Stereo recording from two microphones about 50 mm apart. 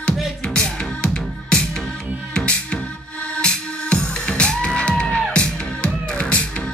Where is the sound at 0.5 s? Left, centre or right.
Centre.